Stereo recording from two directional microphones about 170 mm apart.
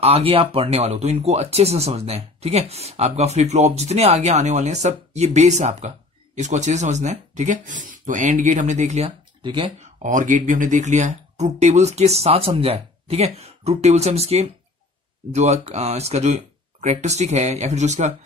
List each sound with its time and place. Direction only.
0.0 s speech: 35° right (ahead or behind)
9.4 s speech: 30° right (ahead or behind)
10.0 s speech: 50° right (ahead or behind)